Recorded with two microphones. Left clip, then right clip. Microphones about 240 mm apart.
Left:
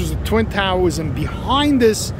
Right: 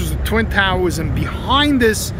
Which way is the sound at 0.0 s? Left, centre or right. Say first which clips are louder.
Even; centre.